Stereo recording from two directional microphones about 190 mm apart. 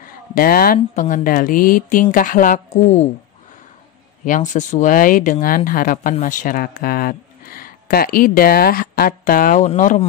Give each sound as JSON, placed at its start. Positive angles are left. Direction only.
{"t": 0.0, "sound": "a sound", "side_deg": 50}
{"t": 0.7, "sound": "speech", "side_deg": 40}
{"t": 4.2, "sound": "speech", "side_deg": 40}